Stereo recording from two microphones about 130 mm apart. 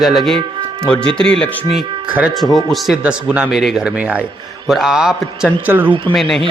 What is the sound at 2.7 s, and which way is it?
A man's voice, 5° right (ahead or behind).